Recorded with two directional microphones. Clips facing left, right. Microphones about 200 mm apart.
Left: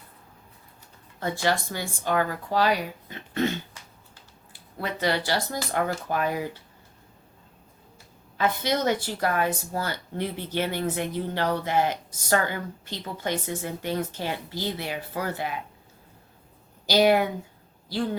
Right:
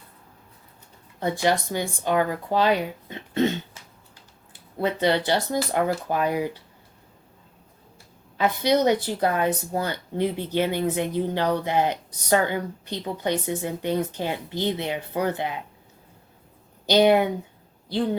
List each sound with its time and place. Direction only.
1.2 s speech: 20° right (ahead or behind)
8.4 s a woman's voice: 15° right (ahead or behind)
16.8 s speech: 20° right (ahead or behind)